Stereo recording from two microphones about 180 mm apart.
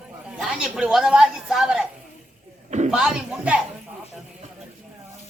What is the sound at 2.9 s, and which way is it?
Music, 5° right (ahead or behind).